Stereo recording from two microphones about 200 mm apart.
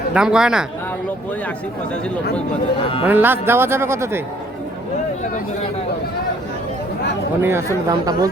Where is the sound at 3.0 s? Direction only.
10° right (ahead or behind).